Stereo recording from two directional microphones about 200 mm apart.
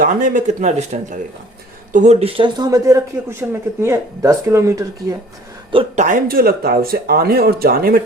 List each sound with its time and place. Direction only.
0.0 s a man's voice: 40° right (ahead or behind); by 5.1 s 15° right (ahead or behind)
5.7 s speech: 40° right (ahead or behind)